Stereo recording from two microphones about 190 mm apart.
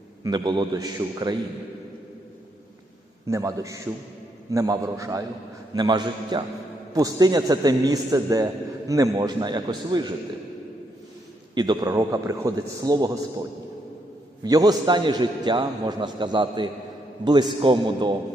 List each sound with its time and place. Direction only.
0.3 s a man's voice: 25° right (ahead or behind)
3.2 s a man's voice: 15° right (ahead or behind)
11.5 s a man's voice: 20° right (ahead or behind)
14.4 s a man's voice: 20° right (ahead or behind)